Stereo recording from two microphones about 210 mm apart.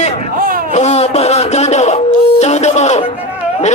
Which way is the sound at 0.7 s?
30° left (ahead or behind).